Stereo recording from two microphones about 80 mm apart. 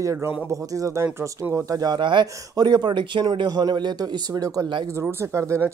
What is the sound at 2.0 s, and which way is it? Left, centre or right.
Speech, right.